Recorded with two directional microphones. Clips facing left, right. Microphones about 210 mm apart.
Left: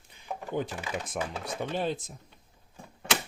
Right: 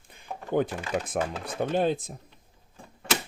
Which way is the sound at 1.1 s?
55° right (ahead or behind).